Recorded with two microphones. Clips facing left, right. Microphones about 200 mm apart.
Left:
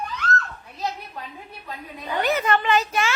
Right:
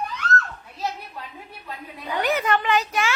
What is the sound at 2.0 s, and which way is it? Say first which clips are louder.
A woman's voice: left 1 dB; 10° right (ahead or behind).